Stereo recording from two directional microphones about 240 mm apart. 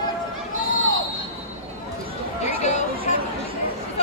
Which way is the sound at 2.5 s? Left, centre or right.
Left.